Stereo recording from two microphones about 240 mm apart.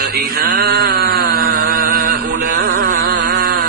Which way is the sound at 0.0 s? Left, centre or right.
Right.